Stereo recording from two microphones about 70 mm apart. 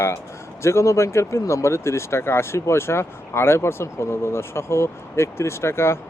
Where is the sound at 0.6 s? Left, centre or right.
Left.